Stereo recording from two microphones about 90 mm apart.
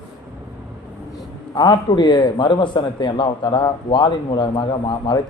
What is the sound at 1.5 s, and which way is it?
A man's voice, 55° left (ahead or behind).